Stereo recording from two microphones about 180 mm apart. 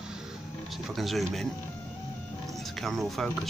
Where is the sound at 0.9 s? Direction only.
Centre (ahead or behind).